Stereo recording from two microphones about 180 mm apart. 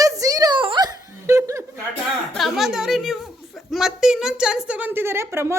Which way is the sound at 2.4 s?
Centre (ahead or behind).